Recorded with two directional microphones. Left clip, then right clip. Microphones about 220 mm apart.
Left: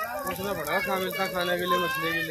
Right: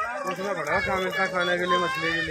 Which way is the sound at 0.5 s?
25° right (ahead or behind).